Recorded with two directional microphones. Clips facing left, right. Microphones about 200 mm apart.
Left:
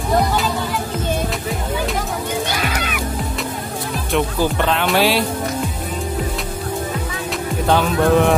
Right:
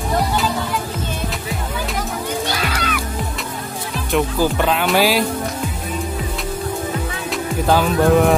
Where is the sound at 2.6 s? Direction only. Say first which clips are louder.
Even; 15° left (ahead or behind).